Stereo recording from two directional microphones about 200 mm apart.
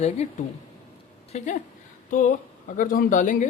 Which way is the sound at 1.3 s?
35° left (ahead or behind).